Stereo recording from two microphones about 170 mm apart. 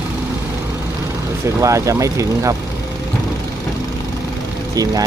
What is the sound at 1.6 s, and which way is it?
Speech, 20° right (ahead or behind).